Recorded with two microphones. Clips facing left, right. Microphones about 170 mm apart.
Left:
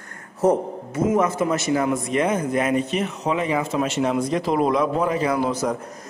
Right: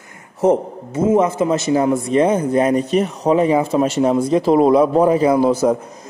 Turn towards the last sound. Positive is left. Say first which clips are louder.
# right 8 dB
turn(degrees=-35)  # may be behind; listen again after turning